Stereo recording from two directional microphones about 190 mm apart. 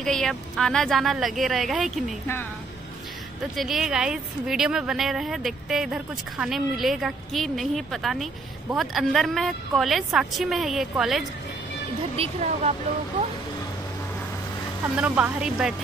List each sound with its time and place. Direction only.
0.0 s a woman's voice: centre (ahead or behind)
3.5 s a woman's voice: centre (ahead or behind)
12.2 s speech: 35° right (ahead or behind)
15.0 s speech: 5° right (ahead or behind)